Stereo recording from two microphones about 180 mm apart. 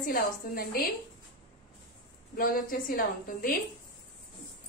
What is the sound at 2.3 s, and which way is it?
A woman's voice, 50° left (ahead or behind).